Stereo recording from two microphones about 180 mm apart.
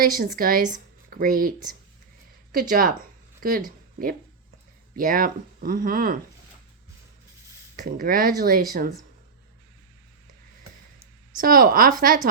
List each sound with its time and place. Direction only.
0.3 s speech: 50° right (ahead or behind)
4.9 s speech: 50° right (ahead or behind)
7.8 s speech: 50° right (ahead or behind)
11.3 s speech: 50° right (ahead or behind)